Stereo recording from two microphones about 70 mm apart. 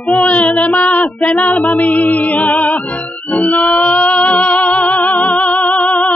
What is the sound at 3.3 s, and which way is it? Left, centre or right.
Music, left.